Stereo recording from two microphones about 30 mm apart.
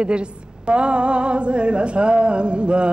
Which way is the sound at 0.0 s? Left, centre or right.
Right.